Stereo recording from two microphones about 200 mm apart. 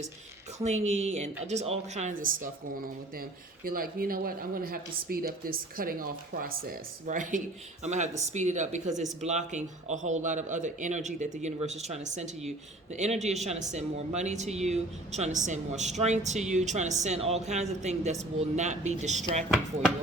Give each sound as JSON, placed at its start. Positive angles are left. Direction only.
{"t": 0.6, "sound": "speech", "side_deg": -35}